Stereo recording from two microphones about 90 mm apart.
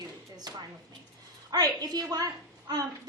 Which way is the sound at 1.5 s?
45° right (ahead or behind).